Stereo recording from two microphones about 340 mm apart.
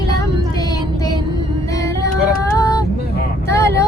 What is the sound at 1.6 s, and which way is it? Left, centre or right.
Music, centre.